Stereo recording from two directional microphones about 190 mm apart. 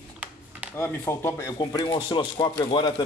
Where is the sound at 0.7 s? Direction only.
10° left (ahead or behind).